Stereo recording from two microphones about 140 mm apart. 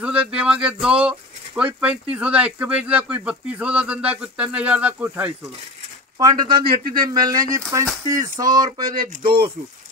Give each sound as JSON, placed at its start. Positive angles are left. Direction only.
{"t": 0.0, "sound": "speech", "side_deg": -10}
{"t": 6.1, "sound": "speech", "side_deg": -30}